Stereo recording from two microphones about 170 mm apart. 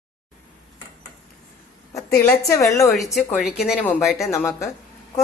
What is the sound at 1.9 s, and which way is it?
Speech, 15° left (ahead or behind).